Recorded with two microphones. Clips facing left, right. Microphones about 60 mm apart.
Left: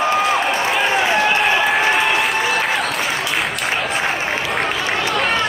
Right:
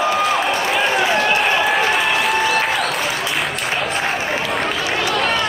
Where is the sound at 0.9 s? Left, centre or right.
Centre.